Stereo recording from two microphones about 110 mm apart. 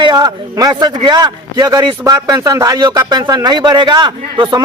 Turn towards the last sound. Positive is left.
turn(degrees=-40)  # may be behind; listen again after turning